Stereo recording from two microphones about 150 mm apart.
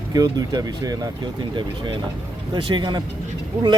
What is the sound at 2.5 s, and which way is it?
Speech, 30° right (ahead or behind).